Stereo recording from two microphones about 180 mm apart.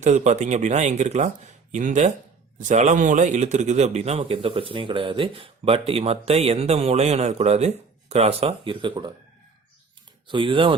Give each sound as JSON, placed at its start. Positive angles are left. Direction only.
{"t": 0.0, "sound": "speech", "side_deg": -40}
{"t": 10.2, "sound": "speech", "side_deg": -30}